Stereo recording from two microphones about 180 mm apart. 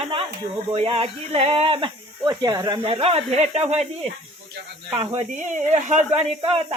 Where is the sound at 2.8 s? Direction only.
30° right (ahead or behind).